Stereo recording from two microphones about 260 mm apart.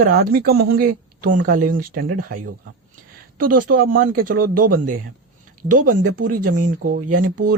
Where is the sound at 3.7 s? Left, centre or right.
Right.